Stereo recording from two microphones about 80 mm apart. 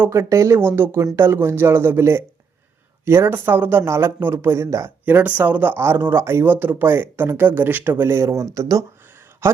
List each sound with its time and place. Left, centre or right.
0.1 s speech: right
5.0 s speech: right
9.4 s speech: right